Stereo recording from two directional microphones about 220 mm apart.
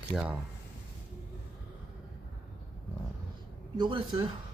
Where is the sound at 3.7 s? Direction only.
20° right (ahead or behind).